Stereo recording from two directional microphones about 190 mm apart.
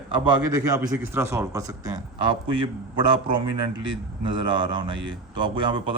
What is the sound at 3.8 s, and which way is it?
Speech, 25° right (ahead or behind).